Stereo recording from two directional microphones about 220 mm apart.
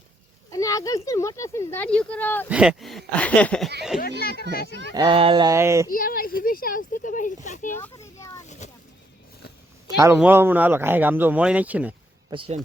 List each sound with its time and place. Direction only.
0.5 s speech: 15° left (ahead or behind)
2.5 s speech: 5° right (ahead or behind)
4.2 s speech: 45° left (ahead or behind)
4.9 s speech: 25° right (ahead or behind)
5.9 s speech: 40° left (ahead or behind)
7.8 s children playing: 15° left (ahead or behind)
8.4 s boat: 30° left (ahead or behind)
9.8 s speech: 15° right (ahead or behind)
12.3 s speech: 25° right (ahead or behind)